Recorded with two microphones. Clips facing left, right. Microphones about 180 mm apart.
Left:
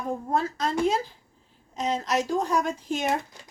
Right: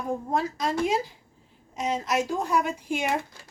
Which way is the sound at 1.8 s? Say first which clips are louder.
Even; 10° right (ahead or behind).